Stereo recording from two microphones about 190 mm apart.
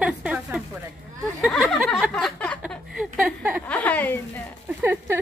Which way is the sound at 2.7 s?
Centre (ahead or behind).